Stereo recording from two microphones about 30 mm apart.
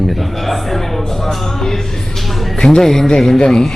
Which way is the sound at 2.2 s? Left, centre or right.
Centre.